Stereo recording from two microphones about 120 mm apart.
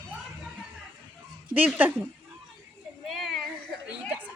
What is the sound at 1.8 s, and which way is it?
Speech, 15° right (ahead or behind).